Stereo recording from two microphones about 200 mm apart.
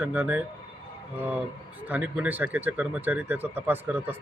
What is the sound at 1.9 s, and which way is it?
Speech, 5° right (ahead or behind).